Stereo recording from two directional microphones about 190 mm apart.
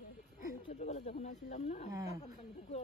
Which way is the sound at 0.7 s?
35° left (ahead or behind).